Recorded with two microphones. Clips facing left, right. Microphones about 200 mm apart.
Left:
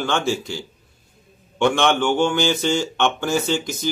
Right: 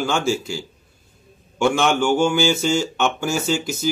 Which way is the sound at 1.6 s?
5° right (ahead or behind).